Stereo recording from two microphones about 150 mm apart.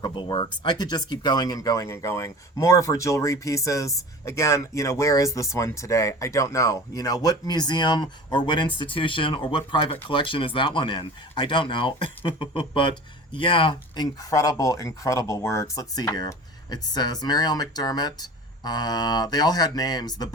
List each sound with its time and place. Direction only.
0.0 s speech: 30° left (ahead or behind)
12.2 s a sound: 35° left (ahead or behind)
13.3 s speech: 35° left (ahead or behind)